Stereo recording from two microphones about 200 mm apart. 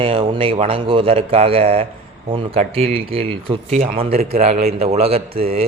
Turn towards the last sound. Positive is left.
turn(degrees=-30)  # may be behind; listen again after turning